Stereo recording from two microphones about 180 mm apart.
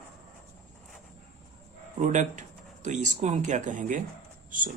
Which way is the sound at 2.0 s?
40° right (ahead or behind).